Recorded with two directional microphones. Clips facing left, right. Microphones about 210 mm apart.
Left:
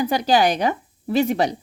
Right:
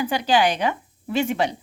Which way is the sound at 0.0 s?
40° left (ahead or behind).